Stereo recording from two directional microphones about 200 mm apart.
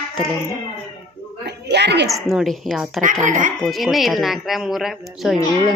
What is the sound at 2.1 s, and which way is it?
Speech, centre (ahead or behind).